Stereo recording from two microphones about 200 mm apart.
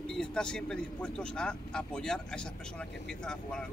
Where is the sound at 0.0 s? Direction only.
5° left (ahead or behind).